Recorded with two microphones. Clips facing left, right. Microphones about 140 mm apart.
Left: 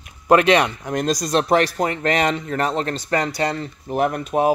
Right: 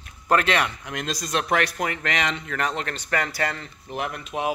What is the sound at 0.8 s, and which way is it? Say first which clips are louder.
Speech: left 9 dB; 40° left (ahead or behind).